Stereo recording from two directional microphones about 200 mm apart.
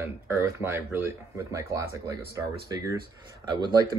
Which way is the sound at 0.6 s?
10° right (ahead or behind).